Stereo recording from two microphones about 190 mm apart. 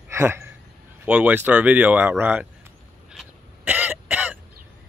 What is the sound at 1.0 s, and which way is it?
Speech, 5° right (ahead or behind).